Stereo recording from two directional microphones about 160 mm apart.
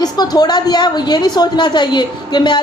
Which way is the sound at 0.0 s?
25° left (ahead or behind).